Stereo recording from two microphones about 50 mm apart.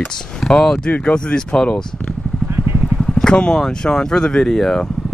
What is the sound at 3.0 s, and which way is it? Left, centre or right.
Speech, centre.